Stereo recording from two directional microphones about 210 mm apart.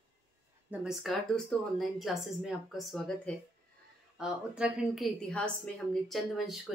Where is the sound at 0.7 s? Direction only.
Centre (ahead or behind).